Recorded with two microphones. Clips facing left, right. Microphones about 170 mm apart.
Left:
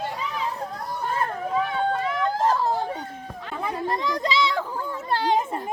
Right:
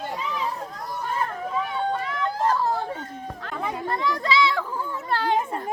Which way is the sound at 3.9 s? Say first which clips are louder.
Right 2 dB; 20° left (ahead or behind).